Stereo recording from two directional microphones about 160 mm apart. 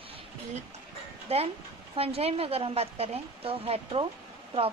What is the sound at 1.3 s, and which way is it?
A woman's voice, 40° right (ahead or behind).